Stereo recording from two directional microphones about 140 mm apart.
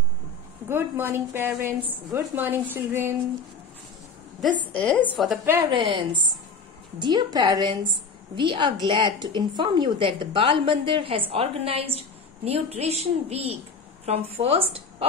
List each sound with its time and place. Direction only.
0.7 s a woman's voice: 15° right (ahead or behind)
4.7 s a woman's voice: 10° left (ahead or behind)
5.1 s a woman's voice: centre (ahead or behind)
5.7 s a woman's voice: 40° right (ahead or behind)